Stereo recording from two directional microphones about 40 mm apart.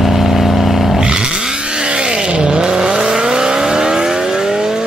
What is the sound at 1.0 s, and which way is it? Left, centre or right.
Vehicle, right.